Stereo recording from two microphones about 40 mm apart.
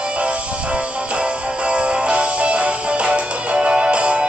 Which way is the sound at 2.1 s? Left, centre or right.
Right.